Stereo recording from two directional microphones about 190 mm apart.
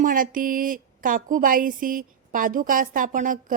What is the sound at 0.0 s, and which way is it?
A woman's voice, 45° right (ahead or behind).